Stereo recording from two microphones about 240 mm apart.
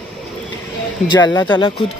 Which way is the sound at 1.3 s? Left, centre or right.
Centre.